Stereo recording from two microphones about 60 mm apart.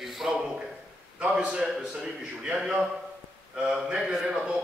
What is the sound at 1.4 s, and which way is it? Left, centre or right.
Speech, centre.